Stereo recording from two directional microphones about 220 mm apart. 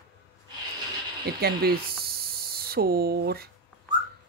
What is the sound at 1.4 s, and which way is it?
Speech, 45° right (ahead or behind).